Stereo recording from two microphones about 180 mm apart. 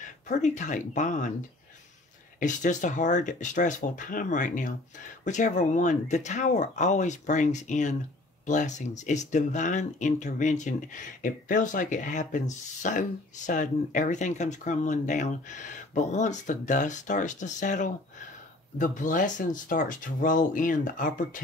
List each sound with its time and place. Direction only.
0.3 s speech: 40° left (ahead or behind)
2.4 s speech: 45° left (ahead or behind)